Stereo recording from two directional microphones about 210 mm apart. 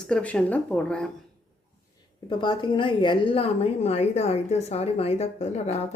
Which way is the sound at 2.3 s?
20° left (ahead or behind).